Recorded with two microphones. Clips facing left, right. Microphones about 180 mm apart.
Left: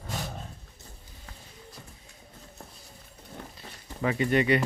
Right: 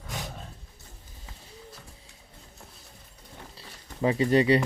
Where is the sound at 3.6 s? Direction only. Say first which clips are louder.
Right 4 dB; 30° right (ahead or behind).